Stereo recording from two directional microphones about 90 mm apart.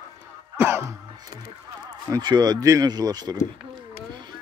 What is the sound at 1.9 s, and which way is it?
A man's voice, 50° right (ahead or behind).